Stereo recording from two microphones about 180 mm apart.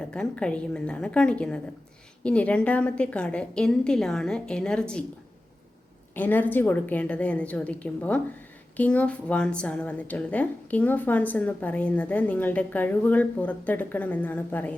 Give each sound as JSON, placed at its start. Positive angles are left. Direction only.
{"t": 0.1, "sound": "a woman's voice", "side_deg": 5}
{"t": 6.1, "sound": "a woman's voice", "side_deg": 10}